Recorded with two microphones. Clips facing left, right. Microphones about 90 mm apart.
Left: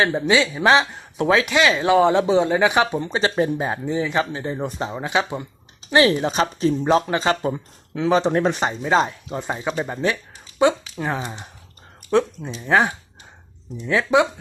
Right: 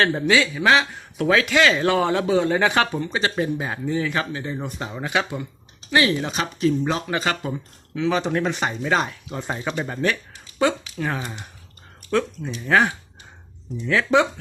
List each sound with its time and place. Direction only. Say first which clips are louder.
0.0 s speech: left 1 dB; 15° left (ahead or behind)
3.0 s speech: left 3 dB; 30° left (ahead or behind)
8.6 s speech: left 3 dB; 25° left (ahead or behind)
9.4 s speech: left 1 dB; 15° left (ahead or behind)